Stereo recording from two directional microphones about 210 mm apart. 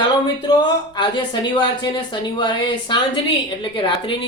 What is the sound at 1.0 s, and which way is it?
Speech, 20° left (ahead or behind).